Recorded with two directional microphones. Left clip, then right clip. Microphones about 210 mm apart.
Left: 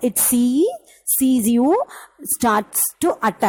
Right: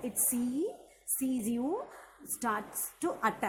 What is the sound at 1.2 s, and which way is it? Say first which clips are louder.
A woman's voice: left 17 dB; 40° left (ahead or behind).